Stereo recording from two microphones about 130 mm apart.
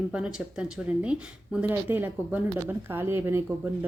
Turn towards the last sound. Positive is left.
turn(degrees=-20)  # may be behind; listen again after turning